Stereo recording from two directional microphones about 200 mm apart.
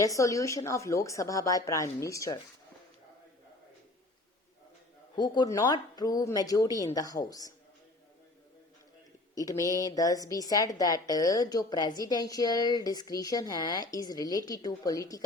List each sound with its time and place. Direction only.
0.0 s a woman's voice: 15° left (ahead or behind)
5.1 s a woman's voice: 20° left (ahead or behind)
9.3 s a woman's voice: 15° left (ahead or behind)